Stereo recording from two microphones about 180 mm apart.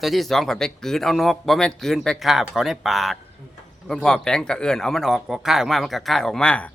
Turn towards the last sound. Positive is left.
turn(degrees=5)  # may be behind; listen again after turning